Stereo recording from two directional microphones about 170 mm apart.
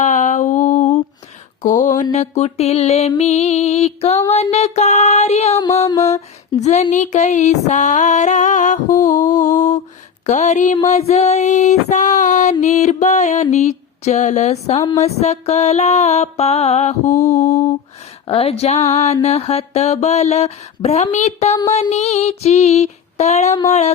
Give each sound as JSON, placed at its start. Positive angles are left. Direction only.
{"t": 0.0, "sound": "a sound", "side_deg": 45}
{"t": 2.1, "sound": "mantra", "side_deg": 40}
{"t": 5.8, "sound": "mantra", "side_deg": 20}
{"t": 6.1, "sound": "a sound", "side_deg": 40}
{"t": 10.8, "sound": "female singing", "side_deg": 40}
{"t": 14.8, "sound": "mantra", "side_deg": 40}